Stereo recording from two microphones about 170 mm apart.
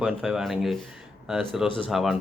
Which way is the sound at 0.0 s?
5° right (ahead or behind).